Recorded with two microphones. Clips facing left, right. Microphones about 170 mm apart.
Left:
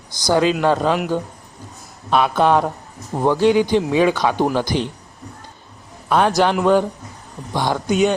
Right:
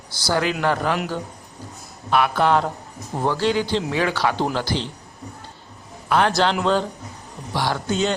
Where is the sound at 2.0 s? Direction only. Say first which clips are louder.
Left 3 dB; 20° left (ahead or behind).